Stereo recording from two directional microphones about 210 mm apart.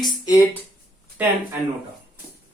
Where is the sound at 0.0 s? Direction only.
15° left (ahead or behind).